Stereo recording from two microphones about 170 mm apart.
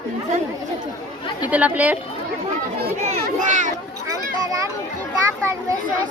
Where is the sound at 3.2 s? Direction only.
50° right (ahead or behind).